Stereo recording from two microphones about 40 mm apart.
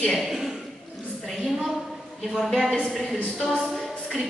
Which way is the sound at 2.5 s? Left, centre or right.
Centre.